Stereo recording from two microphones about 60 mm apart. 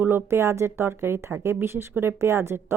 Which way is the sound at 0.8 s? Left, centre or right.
Right.